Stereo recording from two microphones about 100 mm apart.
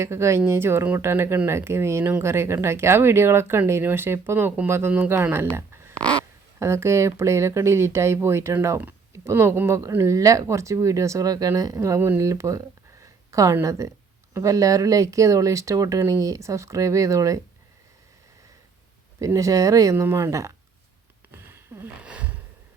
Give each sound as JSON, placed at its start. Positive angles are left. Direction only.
{"t": 0.0, "sound": "speech", "side_deg": -30}
{"t": 5.9, "sound": "crow", "side_deg": 10}
{"t": 6.6, "sound": "speech", "side_deg": -25}
{"t": 19.2, "sound": "speech", "side_deg": -30}
{"t": 21.5, "sound": "a sound", "side_deg": -25}
{"t": 22.0, "sound": "a sound", "side_deg": -15}